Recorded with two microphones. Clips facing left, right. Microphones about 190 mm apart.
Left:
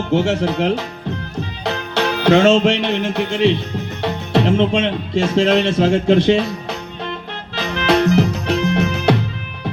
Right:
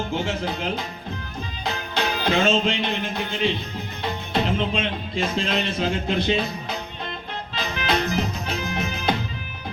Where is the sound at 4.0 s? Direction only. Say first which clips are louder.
Left 7 dB; 75° left (ahead or behind).